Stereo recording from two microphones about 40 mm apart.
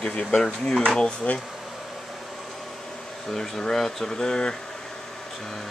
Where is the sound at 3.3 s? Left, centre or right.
Centre.